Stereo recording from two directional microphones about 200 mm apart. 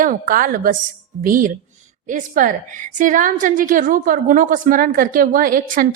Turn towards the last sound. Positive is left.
turn(degrees=-45)  # may be behind; listen again after turning